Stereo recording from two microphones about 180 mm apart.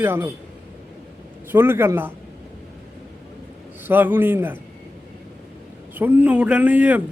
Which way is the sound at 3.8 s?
10° right (ahead or behind).